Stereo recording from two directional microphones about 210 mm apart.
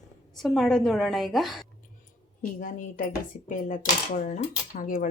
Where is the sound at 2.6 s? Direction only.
40° left (ahead or behind).